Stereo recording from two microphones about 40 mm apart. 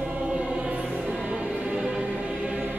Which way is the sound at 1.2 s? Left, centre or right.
Right.